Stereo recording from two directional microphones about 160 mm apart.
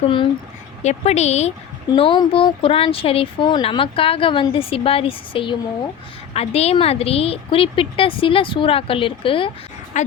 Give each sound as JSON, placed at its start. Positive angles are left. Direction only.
{"t": 0.8, "sound": "speech", "side_deg": 45}
{"t": 1.9, "sound": "speech", "side_deg": 30}
{"t": 10.0, "sound": "a woman's voice", "side_deg": 50}